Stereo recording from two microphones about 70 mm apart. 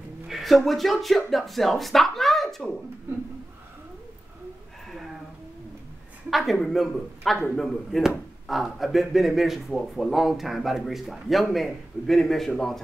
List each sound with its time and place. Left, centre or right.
0.3 s speech: centre
6.3 s a man's voice: centre